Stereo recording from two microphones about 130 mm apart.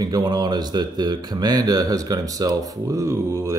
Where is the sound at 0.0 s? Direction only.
30° right (ahead or behind).